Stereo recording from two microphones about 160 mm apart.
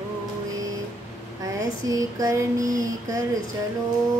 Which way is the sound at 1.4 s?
20° right (ahead or behind).